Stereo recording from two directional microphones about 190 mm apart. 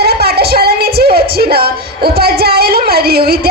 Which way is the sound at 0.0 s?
55° right (ahead or behind).